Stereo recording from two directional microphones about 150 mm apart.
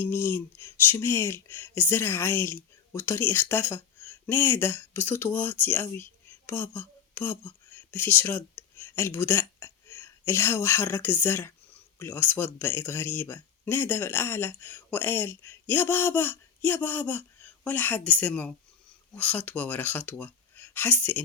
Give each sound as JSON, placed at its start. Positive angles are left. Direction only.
{"t": 0.0, "sound": "speech", "side_deg": 15}